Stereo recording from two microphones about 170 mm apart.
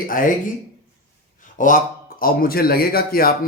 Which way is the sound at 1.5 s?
55° left (ahead or behind).